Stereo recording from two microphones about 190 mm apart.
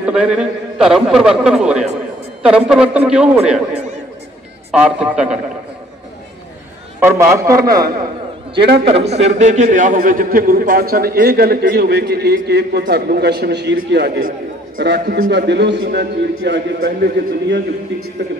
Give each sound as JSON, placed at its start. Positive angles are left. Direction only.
{"t": 0.0, "sound": "a man's voice", "side_deg": -5}
{"t": 4.7, "sound": "a man's voice", "side_deg": -5}
{"t": 7.0, "sound": "a man's voice", "side_deg": -15}
{"t": 8.8, "sound": "a man's voice", "side_deg": -35}